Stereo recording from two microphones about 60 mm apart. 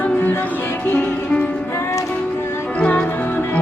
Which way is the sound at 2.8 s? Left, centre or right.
Left.